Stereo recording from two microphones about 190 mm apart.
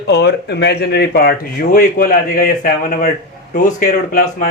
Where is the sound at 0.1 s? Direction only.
60° left (ahead or behind).